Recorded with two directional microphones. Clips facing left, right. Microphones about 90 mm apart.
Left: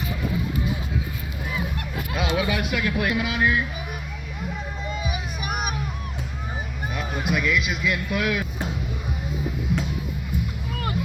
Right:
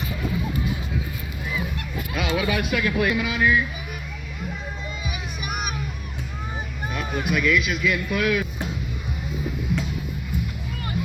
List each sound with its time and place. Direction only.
2.1 s speech: 20° left (ahead or behind)
5.0 s children playing: 35° left (ahead or behind)
6.9 s speech: 15° left (ahead or behind)